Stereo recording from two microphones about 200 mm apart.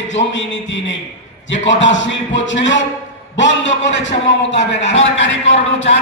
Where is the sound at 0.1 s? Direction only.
65° left (ahead or behind).